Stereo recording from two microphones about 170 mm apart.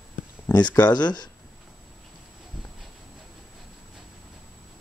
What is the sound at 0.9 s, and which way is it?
Speech, 25° left (ahead or behind).